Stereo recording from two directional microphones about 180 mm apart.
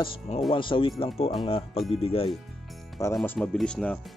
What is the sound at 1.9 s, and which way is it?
Speech, 30° left (ahead or behind).